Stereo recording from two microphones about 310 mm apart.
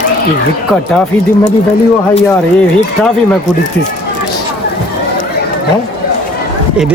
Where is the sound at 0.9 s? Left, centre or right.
Centre.